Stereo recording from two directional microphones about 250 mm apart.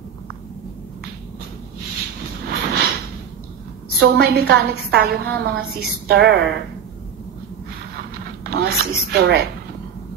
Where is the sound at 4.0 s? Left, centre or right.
Right.